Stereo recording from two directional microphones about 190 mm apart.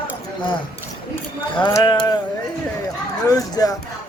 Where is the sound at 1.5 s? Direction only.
25° left (ahead or behind).